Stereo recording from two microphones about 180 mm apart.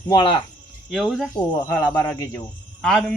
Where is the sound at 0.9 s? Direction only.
Centre (ahead or behind).